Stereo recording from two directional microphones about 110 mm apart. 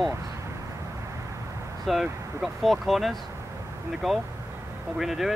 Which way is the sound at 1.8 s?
Centre (ahead or behind).